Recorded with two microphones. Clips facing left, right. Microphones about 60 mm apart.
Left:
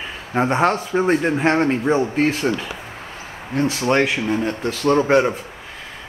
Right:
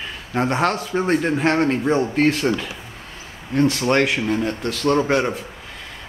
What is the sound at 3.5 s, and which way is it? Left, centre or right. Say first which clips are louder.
A man's voice: right 1 dB; centre.